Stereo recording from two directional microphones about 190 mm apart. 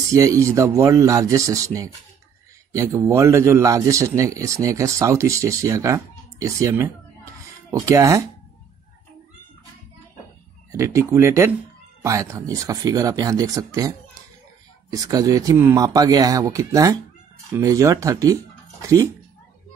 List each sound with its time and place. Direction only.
0.1 s a man's voice: 15° right (ahead or behind)
10.7 s a man's voice: 15° right (ahead or behind)